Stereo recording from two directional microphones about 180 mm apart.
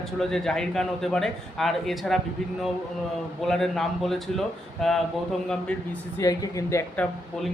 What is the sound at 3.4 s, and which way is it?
A man's voice, centre (ahead or behind).